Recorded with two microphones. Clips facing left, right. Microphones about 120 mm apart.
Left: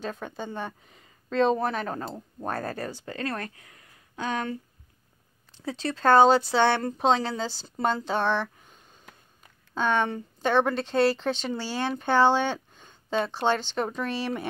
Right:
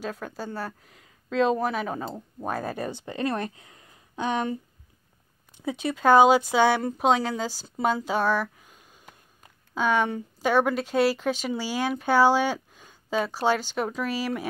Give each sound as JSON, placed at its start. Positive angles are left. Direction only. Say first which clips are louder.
{"t": 0.0, "sound": "speech", "louder": "right 1 dB", "side_deg": -5}